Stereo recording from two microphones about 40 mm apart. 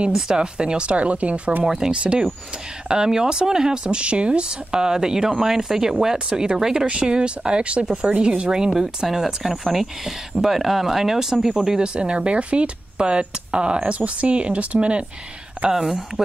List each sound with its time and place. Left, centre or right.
0.1 s speech: centre
1.6 s speech: centre
11.9 s speech: right
15.7 s speech: centre